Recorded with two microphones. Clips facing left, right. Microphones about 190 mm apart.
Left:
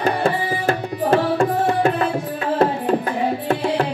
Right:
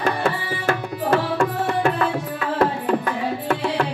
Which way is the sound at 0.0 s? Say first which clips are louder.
Left 3 dB; 35° left (ahead or behind).